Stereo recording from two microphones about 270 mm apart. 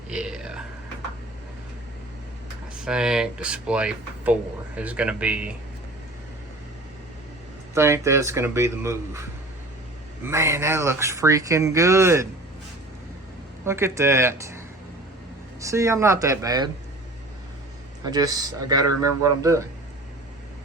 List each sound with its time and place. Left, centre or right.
0.1 s speech: centre
2.8 s speech: centre
7.7 s speech: centre
10.2 s speech: centre
13.7 s speech: centre
15.6 s speech: centre
18.0 s speech: centre